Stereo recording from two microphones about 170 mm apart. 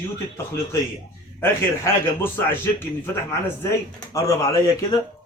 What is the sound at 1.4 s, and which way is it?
A man's voice, 15° left (ahead or behind).